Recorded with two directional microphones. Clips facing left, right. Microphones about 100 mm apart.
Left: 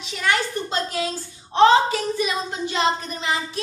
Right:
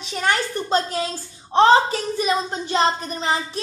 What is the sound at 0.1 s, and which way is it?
Speech, 35° right (ahead or behind).